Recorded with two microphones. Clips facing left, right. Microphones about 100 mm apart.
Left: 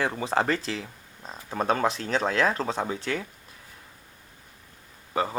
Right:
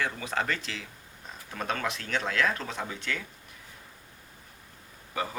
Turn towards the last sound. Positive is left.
turn(degrees=30)  # may be behind; listen again after turning